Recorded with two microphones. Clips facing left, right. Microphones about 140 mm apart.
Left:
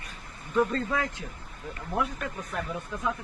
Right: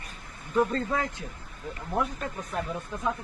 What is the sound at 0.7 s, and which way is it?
Speech, 30° right (ahead or behind).